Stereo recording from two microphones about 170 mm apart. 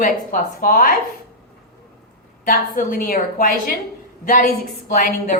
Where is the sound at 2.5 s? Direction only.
55° left (ahead or behind).